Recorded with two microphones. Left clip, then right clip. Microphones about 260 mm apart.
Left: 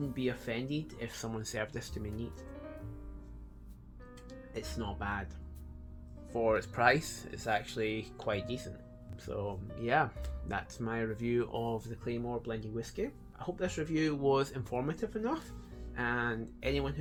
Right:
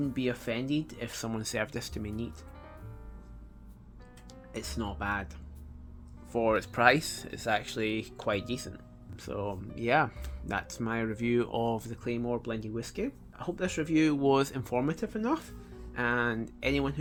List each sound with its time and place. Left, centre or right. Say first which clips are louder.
0.1 s speech: right 4 dB; right
4.3 s speech: right 2 dB; right
6.3 s speech: right 3 dB; right